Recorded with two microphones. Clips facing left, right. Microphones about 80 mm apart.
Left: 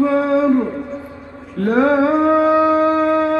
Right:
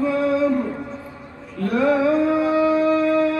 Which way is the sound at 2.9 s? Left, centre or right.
Left.